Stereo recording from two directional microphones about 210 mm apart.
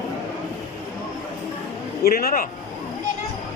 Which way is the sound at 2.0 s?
45° left (ahead or behind).